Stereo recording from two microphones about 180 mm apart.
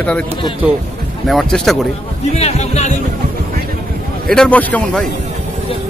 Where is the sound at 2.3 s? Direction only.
35° left (ahead or behind).